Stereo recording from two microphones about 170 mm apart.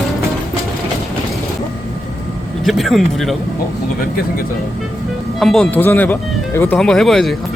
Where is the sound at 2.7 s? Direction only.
Centre (ahead or behind).